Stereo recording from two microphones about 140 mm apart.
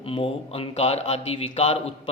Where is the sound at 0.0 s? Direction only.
40° left (ahead or behind).